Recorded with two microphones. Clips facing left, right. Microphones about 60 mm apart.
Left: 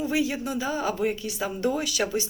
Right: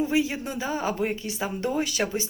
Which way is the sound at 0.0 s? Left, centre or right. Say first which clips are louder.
Right 1 dB; right.